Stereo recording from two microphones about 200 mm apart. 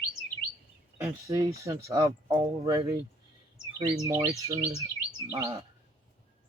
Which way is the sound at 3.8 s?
15° right (ahead or behind).